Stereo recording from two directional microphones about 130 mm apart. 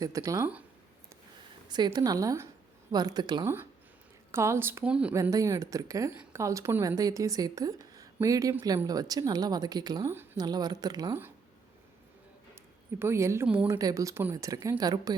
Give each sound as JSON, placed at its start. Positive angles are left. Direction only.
{"t": 0.0, "sound": "speech", "side_deg": -25}
{"t": 1.6, "sound": "speech", "side_deg": -35}
{"t": 3.4, "sound": "speech", "side_deg": -15}
{"t": 4.8, "sound": "speech", "side_deg": -10}
{"t": 5.1, "sound": "speech", "side_deg": -25}
{"t": 13.0, "sound": "speech", "side_deg": -20}
{"t": 13.7, "sound": "speech", "side_deg": -25}